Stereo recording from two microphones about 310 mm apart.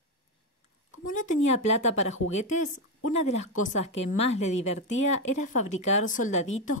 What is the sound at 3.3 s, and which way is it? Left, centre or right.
A woman's voice, left.